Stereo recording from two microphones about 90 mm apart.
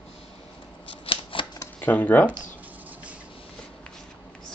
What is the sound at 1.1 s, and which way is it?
Shuffling cards, 80° left.